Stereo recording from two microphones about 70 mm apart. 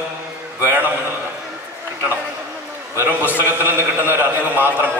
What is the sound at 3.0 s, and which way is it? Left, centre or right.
A man's voice, right.